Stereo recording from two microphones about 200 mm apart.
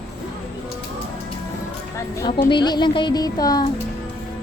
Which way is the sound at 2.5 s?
20° left (ahead or behind).